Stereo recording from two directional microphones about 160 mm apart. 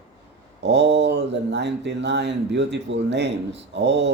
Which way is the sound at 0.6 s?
90° right.